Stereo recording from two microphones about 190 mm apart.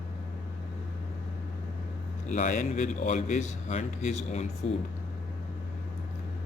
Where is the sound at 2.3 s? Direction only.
40° left (ahead or behind).